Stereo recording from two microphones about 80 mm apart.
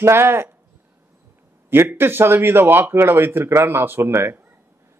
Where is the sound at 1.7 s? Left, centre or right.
Right.